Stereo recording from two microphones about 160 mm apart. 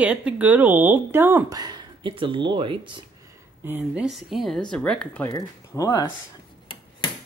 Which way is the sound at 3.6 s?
10° right (ahead or behind).